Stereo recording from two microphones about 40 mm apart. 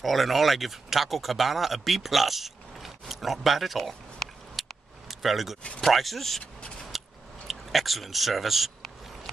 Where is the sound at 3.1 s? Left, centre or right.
Centre.